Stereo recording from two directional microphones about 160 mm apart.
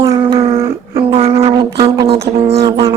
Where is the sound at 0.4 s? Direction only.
35° right (ahead or behind).